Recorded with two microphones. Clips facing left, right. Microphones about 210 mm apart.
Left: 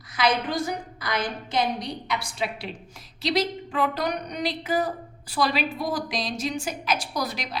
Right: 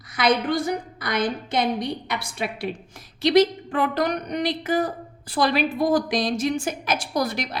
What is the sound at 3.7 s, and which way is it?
A woman's voice, 50° right (ahead or behind).